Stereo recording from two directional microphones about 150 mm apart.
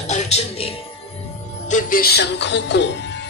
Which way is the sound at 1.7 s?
60° left (ahead or behind).